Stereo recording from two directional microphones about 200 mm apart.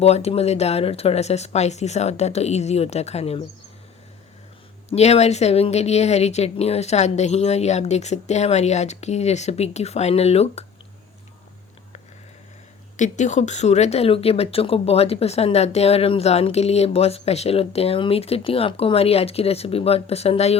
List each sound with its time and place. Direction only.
0.0 s speech: 30° left (ahead or behind)
4.9 s speech: 30° left (ahead or behind)
13.0 s speech: 35° left (ahead or behind)